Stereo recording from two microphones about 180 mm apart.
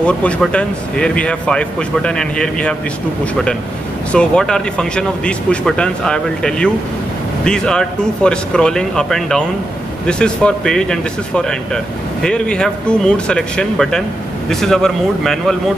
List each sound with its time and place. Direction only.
0.0 s speech: 5° left (ahead or behind)
4.1 s speech: 5° left (ahead or behind)